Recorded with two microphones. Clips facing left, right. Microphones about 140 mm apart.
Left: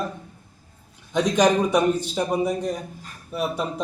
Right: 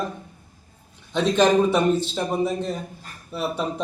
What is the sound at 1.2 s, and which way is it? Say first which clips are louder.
A man's voice: right 1 dB; 15° left (ahead or behind).